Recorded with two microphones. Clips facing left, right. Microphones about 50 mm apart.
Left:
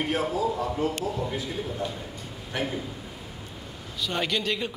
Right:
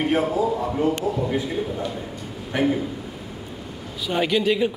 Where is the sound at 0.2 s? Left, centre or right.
Centre.